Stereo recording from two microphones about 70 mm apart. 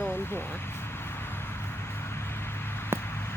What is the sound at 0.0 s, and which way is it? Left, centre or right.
Vehicle, left.